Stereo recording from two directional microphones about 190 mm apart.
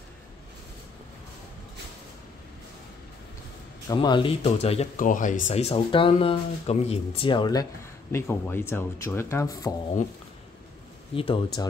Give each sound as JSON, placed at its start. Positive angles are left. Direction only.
{"t": 3.9, "sound": "speech", "side_deg": 25}
{"t": 8.1, "sound": "speech", "side_deg": 15}
{"t": 11.1, "sound": "speech", "side_deg": 30}